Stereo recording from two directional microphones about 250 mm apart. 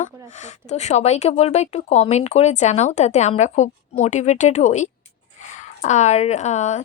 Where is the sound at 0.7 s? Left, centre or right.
Left.